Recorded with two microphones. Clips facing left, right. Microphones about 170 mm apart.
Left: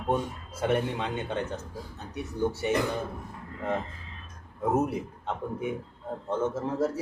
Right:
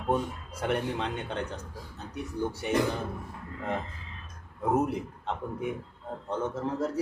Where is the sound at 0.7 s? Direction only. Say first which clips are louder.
Left 1 dB; centre (ahead or behind).